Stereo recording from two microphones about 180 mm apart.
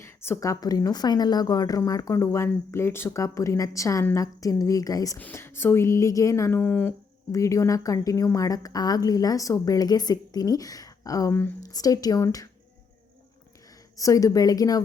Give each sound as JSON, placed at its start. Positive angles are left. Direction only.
{"t": 0.0, "sound": "a woman's voice", "side_deg": 15}
{"t": 13.9, "sound": "a woman's voice", "side_deg": 20}